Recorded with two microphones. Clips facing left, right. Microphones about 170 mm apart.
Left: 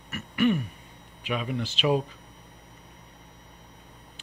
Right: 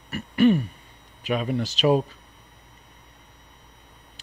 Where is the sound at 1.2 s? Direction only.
40° right (ahead or behind).